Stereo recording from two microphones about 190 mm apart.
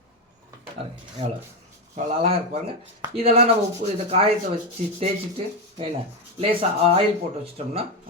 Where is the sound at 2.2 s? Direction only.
30° right (ahead or behind).